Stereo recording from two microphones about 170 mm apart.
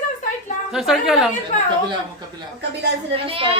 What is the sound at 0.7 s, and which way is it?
Speech, centre (ahead or behind).